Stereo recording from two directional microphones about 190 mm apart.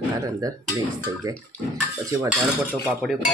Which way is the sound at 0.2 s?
20° right (ahead or behind).